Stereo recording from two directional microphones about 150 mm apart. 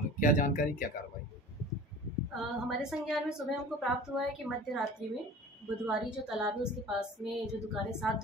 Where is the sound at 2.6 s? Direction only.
Centre (ahead or behind).